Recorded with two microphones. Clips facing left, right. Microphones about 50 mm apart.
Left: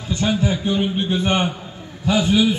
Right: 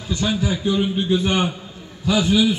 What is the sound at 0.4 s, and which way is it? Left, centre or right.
A man's voice, left.